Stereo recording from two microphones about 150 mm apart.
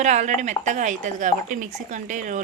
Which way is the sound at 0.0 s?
50° right (ahead or behind).